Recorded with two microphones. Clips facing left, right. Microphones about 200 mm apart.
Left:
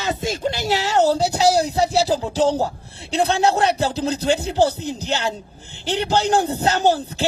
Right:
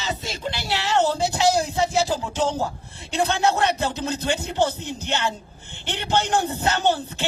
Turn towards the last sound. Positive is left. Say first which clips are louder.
# left 4 dB
turn(degrees=35)  # may be behind; listen again after turning